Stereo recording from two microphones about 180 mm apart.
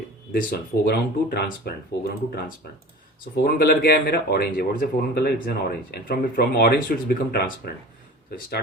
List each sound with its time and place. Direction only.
0.3 s speech: 60° left (ahead or behind)
3.4 s speech: 55° left (ahead or behind)